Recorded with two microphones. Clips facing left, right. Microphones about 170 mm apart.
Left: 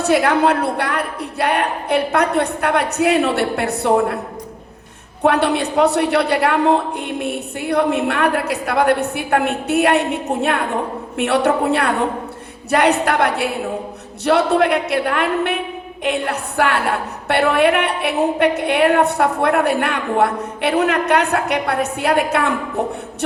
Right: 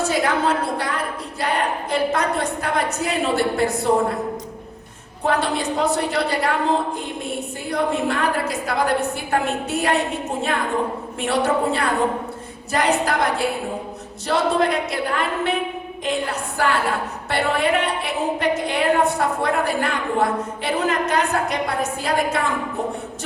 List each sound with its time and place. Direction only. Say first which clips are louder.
0.0 s a woman's voice: left 5 dB; 65° left (ahead or behind)
5.2 s a woman's voice: left 5 dB; 65° left (ahead or behind)